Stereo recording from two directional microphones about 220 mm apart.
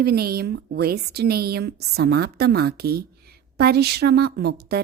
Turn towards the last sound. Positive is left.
turn(degrees=-45)  # may be behind; listen again after turning